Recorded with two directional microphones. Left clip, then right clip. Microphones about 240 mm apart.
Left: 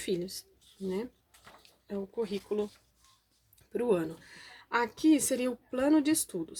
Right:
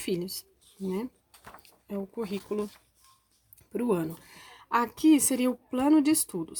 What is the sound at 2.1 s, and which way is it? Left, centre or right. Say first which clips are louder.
Speech: left 1 dB; right.